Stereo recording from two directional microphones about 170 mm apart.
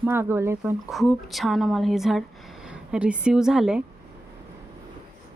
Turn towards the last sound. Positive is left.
turn(degrees=-5)  # may be behind; listen again after turning